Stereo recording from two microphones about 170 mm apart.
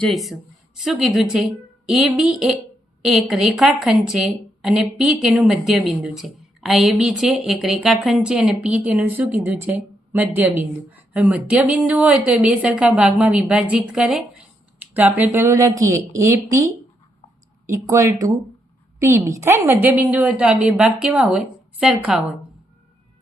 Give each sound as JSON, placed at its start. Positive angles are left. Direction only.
{"t": 0.0, "sound": "a woman's voice", "side_deg": 0}